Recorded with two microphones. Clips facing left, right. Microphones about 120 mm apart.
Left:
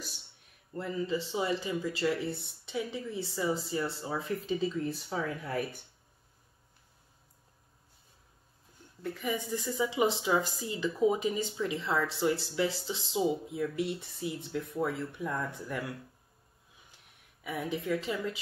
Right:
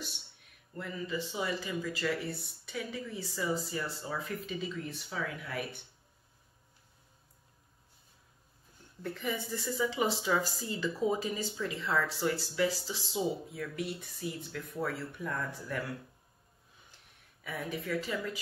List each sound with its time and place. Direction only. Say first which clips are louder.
0.7 s speech: left 4 dB; 30° left (ahead or behind)
9.0 s a woman's voice: left 2 dB; 10° left (ahead or behind)
17.4 s speech: left 3 dB; 15° left (ahead or behind)